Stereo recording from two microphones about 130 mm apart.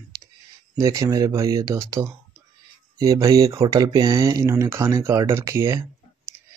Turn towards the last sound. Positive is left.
turn(degrees=-20)  # may be behind; listen again after turning